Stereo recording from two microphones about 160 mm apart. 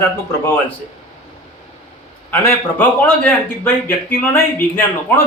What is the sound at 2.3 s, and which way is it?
A man's voice, 10° left (ahead or behind).